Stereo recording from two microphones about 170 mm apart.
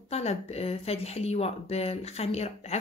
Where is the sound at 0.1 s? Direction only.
40° left (ahead or behind).